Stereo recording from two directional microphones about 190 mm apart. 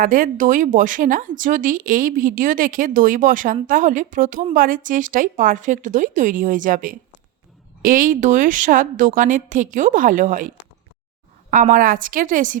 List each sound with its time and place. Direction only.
0.0 s speech: 45° right (ahead or behind)
11.5 s speech: 45° right (ahead or behind)